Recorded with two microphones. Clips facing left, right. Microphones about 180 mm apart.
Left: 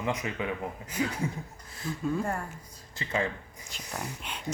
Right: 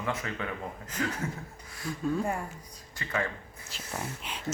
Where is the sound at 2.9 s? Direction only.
20° left (ahead or behind).